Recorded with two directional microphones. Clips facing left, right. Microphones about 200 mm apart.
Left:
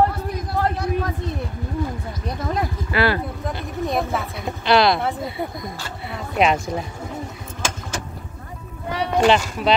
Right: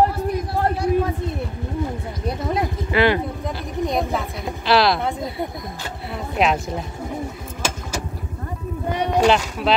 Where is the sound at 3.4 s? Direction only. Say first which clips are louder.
Right 1 dB; centre (ahead or behind).